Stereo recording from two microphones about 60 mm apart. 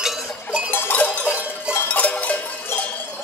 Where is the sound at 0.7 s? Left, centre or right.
Left.